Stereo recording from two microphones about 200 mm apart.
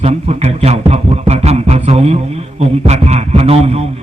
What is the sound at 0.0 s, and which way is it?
Mantra, 30° right (ahead or behind).